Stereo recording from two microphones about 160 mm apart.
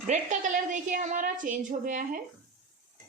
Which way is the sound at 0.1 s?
50° right (ahead or behind).